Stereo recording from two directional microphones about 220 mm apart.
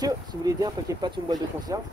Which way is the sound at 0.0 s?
15° right (ahead or behind).